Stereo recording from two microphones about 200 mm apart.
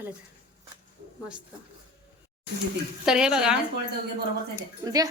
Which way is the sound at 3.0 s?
5° right (ahead or behind).